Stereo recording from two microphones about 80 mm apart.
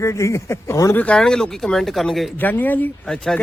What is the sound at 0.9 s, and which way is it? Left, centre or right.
Speech, left.